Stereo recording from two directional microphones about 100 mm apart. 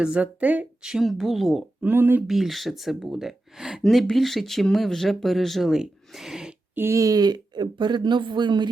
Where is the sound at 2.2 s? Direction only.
Centre (ahead or behind).